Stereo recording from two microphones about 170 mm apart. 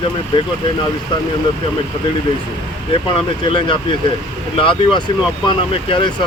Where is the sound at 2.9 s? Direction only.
30° left (ahead or behind).